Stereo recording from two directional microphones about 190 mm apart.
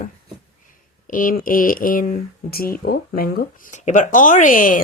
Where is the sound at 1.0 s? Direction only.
45° left (ahead or behind).